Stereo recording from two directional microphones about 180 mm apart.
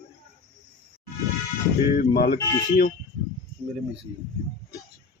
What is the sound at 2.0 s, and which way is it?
Speech, 55° left (ahead or behind).